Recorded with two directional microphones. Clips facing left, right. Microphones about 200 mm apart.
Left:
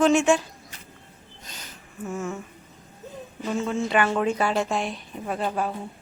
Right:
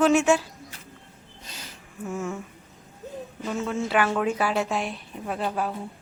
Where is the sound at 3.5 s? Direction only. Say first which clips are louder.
Left 2 dB; 5° right (ahead or behind).